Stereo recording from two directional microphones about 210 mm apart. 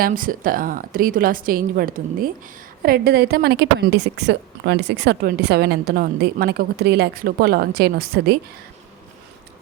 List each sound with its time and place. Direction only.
0.0 s a woman's voice: 40° right (ahead or behind)